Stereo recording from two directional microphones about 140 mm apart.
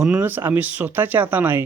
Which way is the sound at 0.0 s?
10° right (ahead or behind).